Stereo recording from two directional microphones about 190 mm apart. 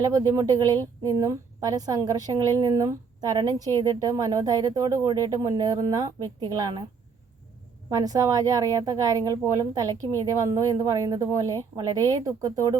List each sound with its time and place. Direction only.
0.0 s a woman's voice: 20° right (ahead or behind)
7.9 s speech: 20° right (ahead or behind)